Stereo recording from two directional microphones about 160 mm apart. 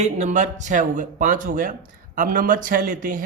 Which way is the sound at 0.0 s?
50° right (ahead or behind).